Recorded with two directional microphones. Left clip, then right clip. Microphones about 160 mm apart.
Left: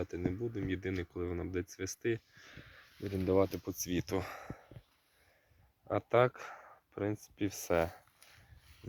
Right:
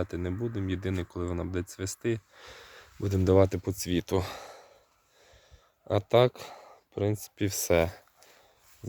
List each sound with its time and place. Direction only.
0.0 s speech: 20° right (ahead or behind)
2.4 s speech: 40° right (ahead or behind)
5.9 s speech: 25° right (ahead or behind)